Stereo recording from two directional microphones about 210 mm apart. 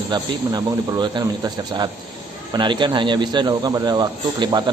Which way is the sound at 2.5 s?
20° right (ahead or behind).